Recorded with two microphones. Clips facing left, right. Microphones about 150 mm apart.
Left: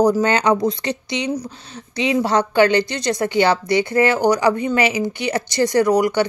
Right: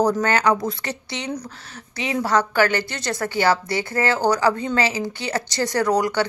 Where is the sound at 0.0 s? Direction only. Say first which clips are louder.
Left 3 dB; 15° left (ahead or behind).